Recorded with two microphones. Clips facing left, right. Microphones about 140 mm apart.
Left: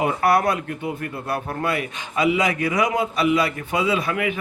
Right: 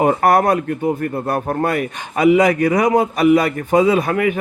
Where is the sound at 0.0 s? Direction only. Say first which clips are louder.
Right 5 dB; 45° right (ahead or behind).